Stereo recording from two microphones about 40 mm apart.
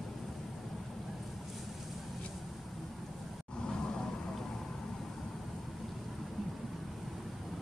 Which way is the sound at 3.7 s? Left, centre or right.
Centre.